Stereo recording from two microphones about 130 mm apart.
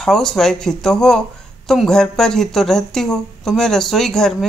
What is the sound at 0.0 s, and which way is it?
A woman's voice, 5° left (ahead or behind).